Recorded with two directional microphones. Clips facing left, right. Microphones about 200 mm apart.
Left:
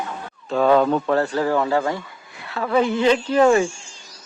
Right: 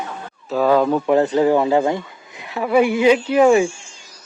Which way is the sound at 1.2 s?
20° right (ahead or behind).